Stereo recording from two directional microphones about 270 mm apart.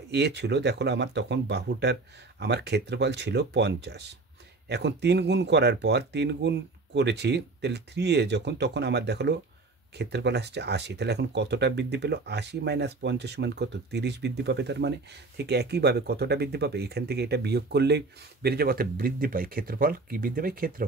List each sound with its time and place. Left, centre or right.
0.1 s speech: right